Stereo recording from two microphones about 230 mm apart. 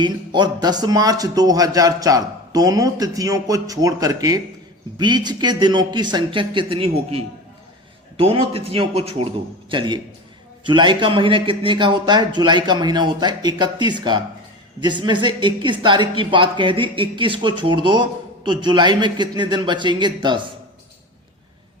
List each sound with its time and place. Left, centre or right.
0.0 s a man's voice: centre